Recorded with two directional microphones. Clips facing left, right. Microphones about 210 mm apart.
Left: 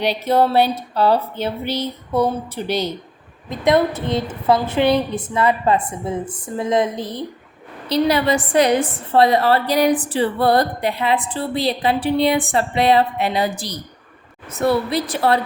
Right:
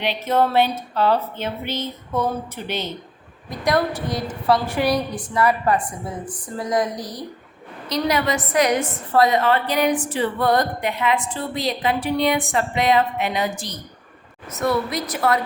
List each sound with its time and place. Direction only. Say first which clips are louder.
0.0 s a woman's voice: left 3 dB; 35° left (ahead or behind)
3.5 s a woman's voice: left 4 dB; 25° left (ahead or behind)